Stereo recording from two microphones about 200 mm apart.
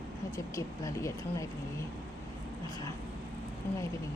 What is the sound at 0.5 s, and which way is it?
Speech, 15° left (ahead or behind).